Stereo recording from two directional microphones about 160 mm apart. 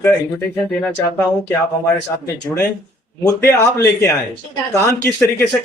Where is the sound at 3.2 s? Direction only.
15° left (ahead or behind).